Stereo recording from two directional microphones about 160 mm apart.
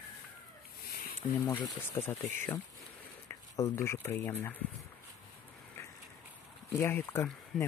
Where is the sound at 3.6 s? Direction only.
20° left (ahead or behind).